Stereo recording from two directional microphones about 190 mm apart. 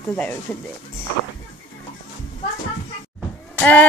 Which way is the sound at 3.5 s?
10° left (ahead or behind).